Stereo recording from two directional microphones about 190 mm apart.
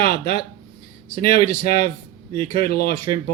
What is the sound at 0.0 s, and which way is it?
Speech, 50° left (ahead or behind).